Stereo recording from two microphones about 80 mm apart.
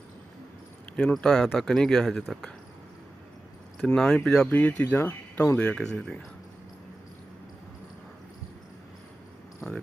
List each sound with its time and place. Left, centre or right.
1.0 s speech: centre
3.8 s speech: centre
4.5 s speech: left
5.5 s speech: centre
9.6 s cricket: centre